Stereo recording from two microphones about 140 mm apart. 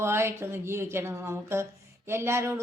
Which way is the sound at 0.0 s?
15° right (ahead or behind).